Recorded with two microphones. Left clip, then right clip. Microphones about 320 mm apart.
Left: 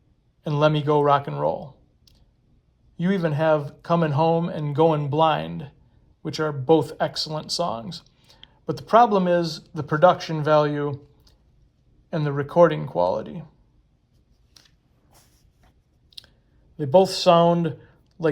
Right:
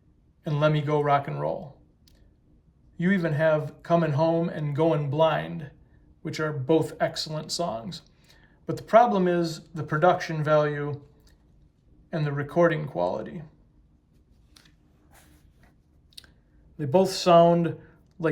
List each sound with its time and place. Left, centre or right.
0.4 s speech: centre
3.0 s speech: centre
10.8 s drip: centre
12.1 s speech: centre
14.6 s scissors: left
16.7 s speech: centre